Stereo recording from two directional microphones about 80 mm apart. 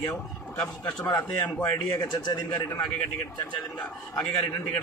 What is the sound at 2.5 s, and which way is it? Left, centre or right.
Speech, left.